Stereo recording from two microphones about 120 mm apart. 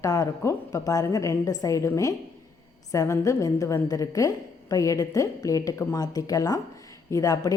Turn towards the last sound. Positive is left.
turn(degrees=30)  # may be behind; listen again after turning